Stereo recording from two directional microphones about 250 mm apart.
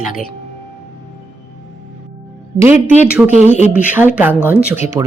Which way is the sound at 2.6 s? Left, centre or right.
Centre.